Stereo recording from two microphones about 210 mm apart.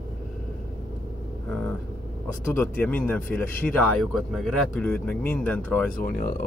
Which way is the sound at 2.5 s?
10° left (ahead or behind).